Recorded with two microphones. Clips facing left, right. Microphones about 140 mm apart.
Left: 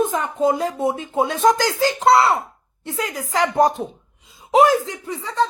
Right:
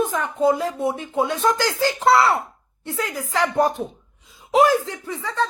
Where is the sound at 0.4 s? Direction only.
20° left (ahead or behind).